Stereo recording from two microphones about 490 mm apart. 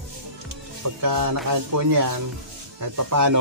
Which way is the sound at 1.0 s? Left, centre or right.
Right.